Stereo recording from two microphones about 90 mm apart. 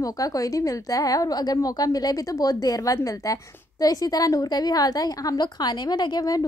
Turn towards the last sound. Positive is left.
turn(degrees=45)  # may be behind; listen again after turning